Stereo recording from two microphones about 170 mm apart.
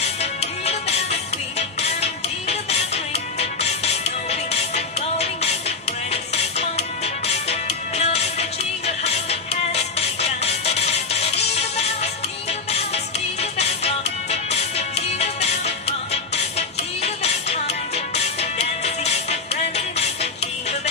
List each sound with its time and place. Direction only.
0.0 s music: 40° left (ahead or behind)